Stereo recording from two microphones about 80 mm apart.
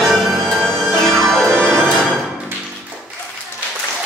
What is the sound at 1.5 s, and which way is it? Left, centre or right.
Music, right.